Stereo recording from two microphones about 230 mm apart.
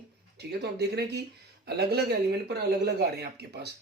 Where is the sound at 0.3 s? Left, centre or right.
Right.